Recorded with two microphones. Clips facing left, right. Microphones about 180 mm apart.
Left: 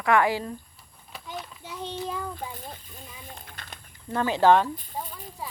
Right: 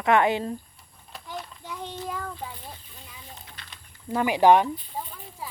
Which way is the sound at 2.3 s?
45° left (ahead or behind).